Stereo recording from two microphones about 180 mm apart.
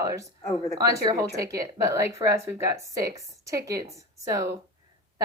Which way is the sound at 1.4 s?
20° right (ahead or behind).